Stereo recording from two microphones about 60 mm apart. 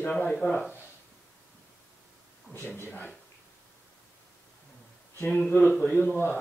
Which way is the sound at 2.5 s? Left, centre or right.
Left.